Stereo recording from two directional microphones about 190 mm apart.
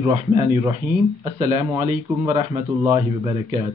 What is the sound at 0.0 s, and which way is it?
Speech, 25° right (ahead or behind).